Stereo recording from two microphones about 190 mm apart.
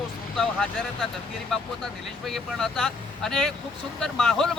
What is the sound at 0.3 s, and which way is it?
Speech, 5° left (ahead or behind).